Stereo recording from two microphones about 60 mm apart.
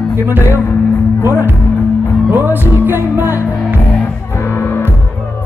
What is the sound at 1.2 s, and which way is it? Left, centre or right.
Music, right.